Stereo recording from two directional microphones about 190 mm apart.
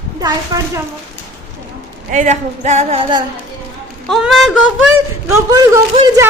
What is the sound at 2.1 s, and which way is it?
A woman's voice, 40° right (ahead or behind).